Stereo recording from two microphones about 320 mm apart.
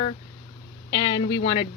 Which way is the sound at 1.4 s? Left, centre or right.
Centre.